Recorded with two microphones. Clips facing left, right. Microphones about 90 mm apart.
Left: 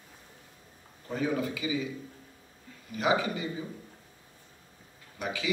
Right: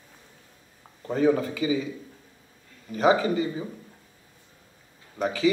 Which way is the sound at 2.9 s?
35° right (ahead or behind).